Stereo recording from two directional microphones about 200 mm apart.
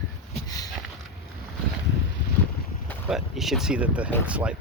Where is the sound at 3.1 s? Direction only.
Centre (ahead or behind).